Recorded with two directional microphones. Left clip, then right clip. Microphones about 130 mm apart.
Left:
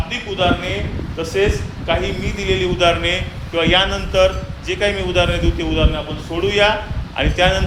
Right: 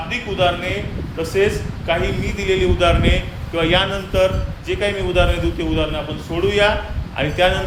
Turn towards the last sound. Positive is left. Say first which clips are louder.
# left 1 dB
turn(degrees=15)  # may be behind; listen again after turning